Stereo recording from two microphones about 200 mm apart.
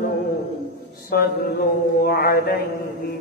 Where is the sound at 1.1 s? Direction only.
50° left (ahead or behind).